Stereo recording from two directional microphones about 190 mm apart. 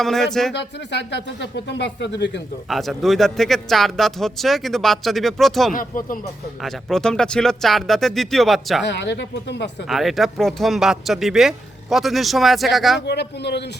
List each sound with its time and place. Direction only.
0.0 s a man's voice: centre (ahead or behind)
0.5 s speech: 65° left (ahead or behind)
2.6 s a man's voice: centre (ahead or behind)
5.7 s speech: 45° left (ahead or behind)
6.6 s a man's voice: centre (ahead or behind)
8.8 s speech: 65° left (ahead or behind)
9.9 s a man's voice: centre (ahead or behind)
13.1 s speech: 60° left (ahead or behind)